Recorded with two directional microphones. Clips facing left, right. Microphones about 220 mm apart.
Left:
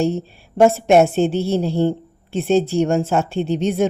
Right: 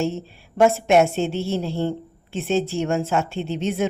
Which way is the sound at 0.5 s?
35° left (ahead or behind).